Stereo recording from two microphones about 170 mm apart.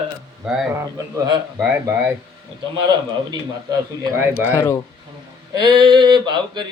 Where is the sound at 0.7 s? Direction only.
20° right (ahead or behind).